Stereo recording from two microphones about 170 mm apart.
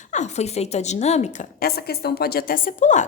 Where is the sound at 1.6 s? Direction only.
65° left (ahead or behind); by 3.1 s 45° left (ahead or behind).